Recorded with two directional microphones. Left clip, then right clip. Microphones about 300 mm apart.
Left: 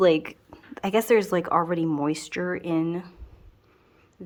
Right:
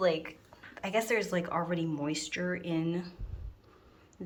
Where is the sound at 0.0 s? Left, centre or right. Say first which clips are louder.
Left 9 dB; left; by 3.2 s centre.